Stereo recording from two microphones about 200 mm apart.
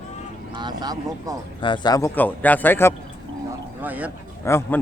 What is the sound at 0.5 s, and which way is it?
Speech, 20° right (ahead or behind).